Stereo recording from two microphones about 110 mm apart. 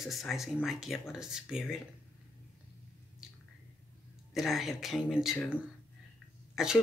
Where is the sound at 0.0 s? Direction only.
Centre (ahead or behind).